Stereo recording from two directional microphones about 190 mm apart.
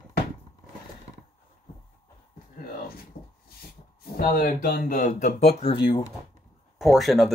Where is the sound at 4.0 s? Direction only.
50° left (ahead or behind); by 6.1 s 25° left (ahead or behind).